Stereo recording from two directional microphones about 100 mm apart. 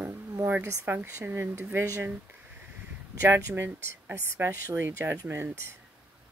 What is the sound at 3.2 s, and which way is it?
Speech, 25° right (ahead or behind).